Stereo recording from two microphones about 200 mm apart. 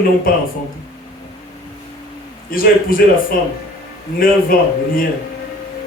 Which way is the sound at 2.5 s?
45° left (ahead or behind).